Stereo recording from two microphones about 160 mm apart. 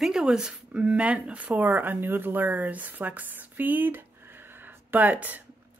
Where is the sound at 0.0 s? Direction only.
5° right (ahead or behind).